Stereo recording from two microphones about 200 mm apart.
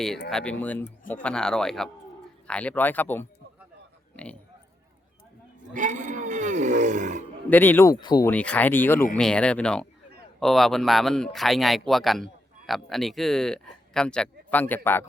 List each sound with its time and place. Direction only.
0.3 s a man's voice: centre (ahead or behind)
5.7 s a sound: 40° right (ahead or behind)
7.5 s speech: 10° left (ahead or behind)
8.3 s a man's voice: 5° left (ahead or behind)